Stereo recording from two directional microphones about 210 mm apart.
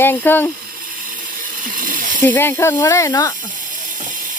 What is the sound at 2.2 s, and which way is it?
Speech, 10° left (ahead or behind).